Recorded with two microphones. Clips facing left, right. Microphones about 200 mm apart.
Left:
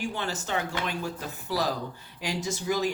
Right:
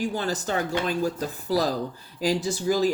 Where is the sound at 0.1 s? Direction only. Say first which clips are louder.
Right 4 dB; 40° right (ahead or behind).